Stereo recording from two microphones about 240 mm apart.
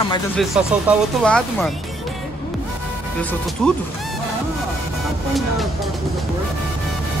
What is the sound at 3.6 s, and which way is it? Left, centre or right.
Speech, centre.